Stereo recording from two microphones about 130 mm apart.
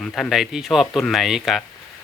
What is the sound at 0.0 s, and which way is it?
Speech, 5° left (ahead or behind).